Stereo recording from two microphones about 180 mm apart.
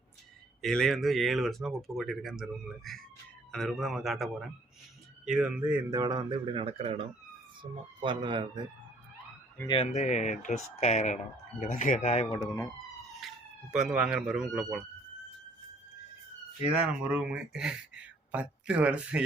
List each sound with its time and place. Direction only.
0.6 s speech: 5° left (ahead or behind)
5.9 s speech: 20° right (ahead or behind)
9.6 s speech: 35° left (ahead or behind)
13.1 s speech: centre (ahead or behind)
16.7 s speech: 5° right (ahead or behind)